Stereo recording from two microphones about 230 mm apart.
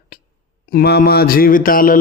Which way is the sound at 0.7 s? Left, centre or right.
Left.